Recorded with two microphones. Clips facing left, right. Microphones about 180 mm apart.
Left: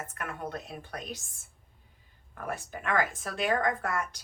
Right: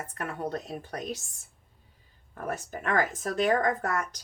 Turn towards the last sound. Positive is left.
turn(degrees=-40)  # may be behind; listen again after turning